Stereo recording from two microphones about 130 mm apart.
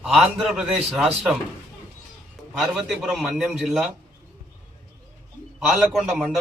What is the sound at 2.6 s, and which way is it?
A man's voice, centre (ahead or behind).